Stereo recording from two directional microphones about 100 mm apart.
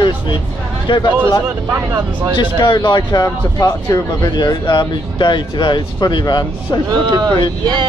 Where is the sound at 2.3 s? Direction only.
50° left (ahead or behind); by 4.3 s 35° left (ahead or behind).